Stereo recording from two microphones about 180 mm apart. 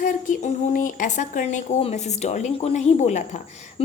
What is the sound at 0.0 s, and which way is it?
Speech, 45° left (ahead or behind).